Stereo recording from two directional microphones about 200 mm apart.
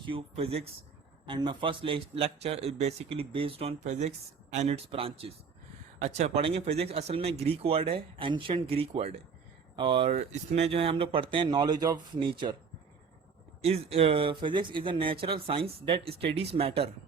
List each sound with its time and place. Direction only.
0.0 s speech: 25° right (ahead or behind)
13.6 s speech: 30° right (ahead or behind)